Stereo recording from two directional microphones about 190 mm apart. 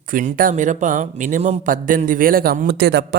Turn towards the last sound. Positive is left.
turn(degrees=-60)  # may be behind; listen again after turning